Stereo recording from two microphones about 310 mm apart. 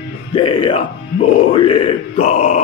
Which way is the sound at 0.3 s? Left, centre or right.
Centre.